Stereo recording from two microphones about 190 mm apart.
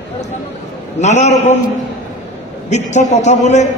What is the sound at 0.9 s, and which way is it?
Speech, 40° left (ahead or behind).